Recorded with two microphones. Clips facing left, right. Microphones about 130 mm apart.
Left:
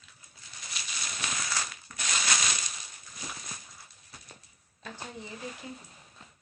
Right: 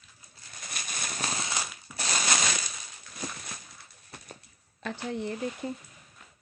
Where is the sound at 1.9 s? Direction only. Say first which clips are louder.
Right 4 dB; 10° right (ahead or behind).